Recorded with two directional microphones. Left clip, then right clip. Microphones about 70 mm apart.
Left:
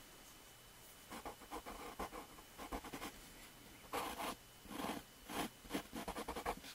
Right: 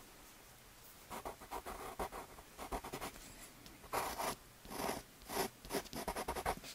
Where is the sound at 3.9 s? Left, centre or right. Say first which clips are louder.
Right 4 dB; right.